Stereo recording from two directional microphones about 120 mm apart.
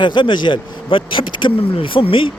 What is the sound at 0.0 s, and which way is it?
Speech, 40° left (ahead or behind).